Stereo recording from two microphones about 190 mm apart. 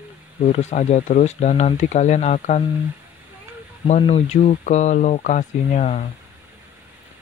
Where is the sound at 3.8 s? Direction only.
35° left (ahead or behind).